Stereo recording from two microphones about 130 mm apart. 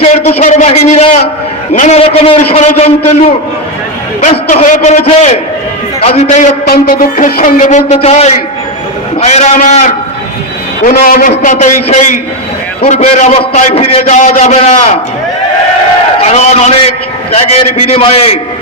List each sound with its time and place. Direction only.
0.0 s a sound: 55° left (ahead or behind)
0.4 s a man's voice: 65° left (ahead or behind)
1.7 s a man's voice: 75° left (ahead or behind)
2.0 s a man's voice: 50° left (ahead or behind)
4.2 s a man's voice: 60° left (ahead or behind)
10.8 s a man's voice: 85° left; by 12.0 s 65° left (ahead or behind)
12.8 s a man's voice: 55° left (ahead or behind)
14.2 s a man's voice: 65° left (ahead or behind)
16.1 s a sound: 55° left (ahead or behind)
17.3 s a man's voice: 50° left (ahead or behind)